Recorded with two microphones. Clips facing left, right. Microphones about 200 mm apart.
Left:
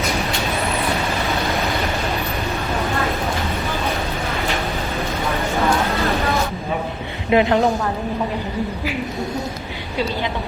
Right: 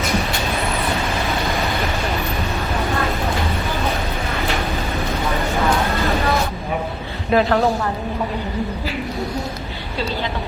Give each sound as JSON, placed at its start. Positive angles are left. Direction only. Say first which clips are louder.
{"t": 7.3, "sound": "a woman's voice", "louder": "left 1 dB", "side_deg": 20}